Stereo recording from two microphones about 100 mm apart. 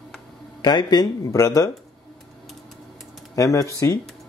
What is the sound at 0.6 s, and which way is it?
Speech, 45° left (ahead or behind).